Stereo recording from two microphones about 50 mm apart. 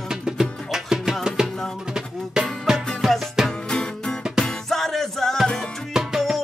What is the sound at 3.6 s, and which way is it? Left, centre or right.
Music, centre.